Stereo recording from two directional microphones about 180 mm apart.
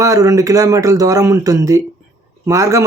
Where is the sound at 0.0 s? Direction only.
20° right (ahead or behind).